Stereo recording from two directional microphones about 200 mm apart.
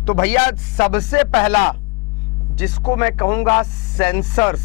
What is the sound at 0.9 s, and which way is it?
Speech, 10° left (ahead or behind).